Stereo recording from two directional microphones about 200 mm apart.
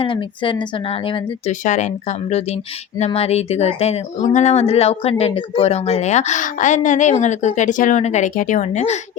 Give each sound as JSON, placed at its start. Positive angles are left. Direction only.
{"t": 0.0, "sound": "a woman's voice", "side_deg": 25}